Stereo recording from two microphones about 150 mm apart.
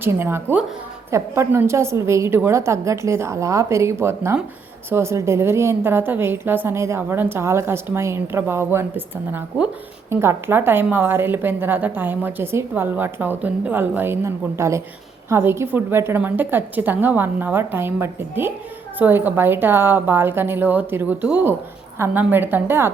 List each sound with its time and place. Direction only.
0.0 s a woman's voice: 15° right (ahead or behind)